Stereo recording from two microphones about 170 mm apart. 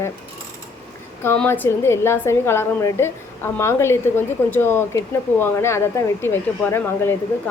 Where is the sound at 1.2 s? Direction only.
10° left (ahead or behind).